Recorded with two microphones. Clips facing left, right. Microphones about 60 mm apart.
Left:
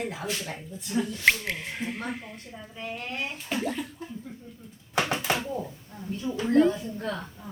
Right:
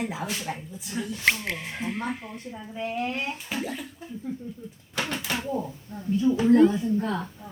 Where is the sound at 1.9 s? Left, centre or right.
Centre.